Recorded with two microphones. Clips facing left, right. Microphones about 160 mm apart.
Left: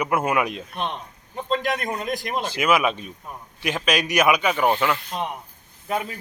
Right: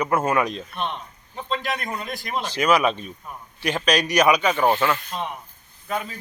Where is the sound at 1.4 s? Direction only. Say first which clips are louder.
Left 3 dB; 5° left (ahead or behind).